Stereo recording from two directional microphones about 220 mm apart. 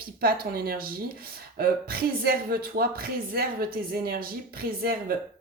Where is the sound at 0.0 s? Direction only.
45° right (ahead or behind).